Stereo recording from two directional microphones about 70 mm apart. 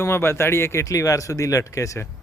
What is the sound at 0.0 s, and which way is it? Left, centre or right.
Speech, left.